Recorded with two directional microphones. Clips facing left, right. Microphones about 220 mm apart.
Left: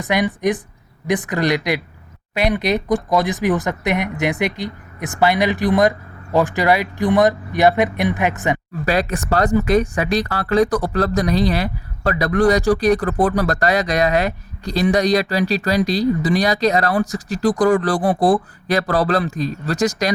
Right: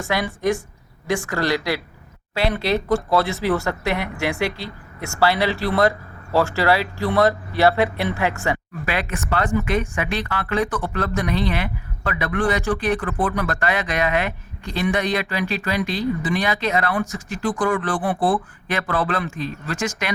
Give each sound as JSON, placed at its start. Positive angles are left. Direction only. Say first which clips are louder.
{"t": 0.0, "sound": "speech", "louder": "left 4 dB", "side_deg": 20}
{"t": 8.9, "sound": "speech", "louder": "left 6 dB", "side_deg": 40}